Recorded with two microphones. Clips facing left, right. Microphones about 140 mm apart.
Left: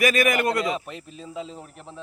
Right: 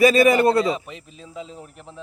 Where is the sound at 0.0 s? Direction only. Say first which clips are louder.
Right 7 dB; 30° right (ahead or behind).